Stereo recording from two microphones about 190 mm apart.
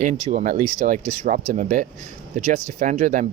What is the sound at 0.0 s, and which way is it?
Speech, 35° right (ahead or behind).